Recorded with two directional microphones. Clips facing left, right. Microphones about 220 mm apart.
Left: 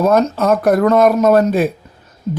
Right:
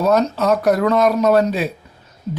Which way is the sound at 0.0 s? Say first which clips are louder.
Left 3 dB; 50° left (ahead or behind).